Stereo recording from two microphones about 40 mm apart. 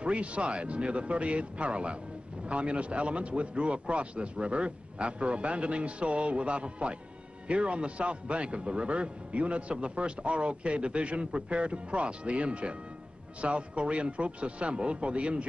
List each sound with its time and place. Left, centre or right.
0.0 s a man's voice: right